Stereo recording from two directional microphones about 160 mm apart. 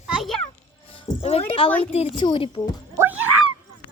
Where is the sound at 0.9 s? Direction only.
35° left (ahead or behind).